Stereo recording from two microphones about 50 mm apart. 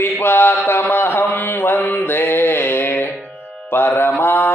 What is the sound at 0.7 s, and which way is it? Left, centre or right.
Mantra, left.